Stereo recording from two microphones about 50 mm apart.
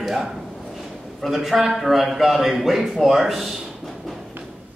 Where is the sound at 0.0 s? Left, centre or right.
Centre.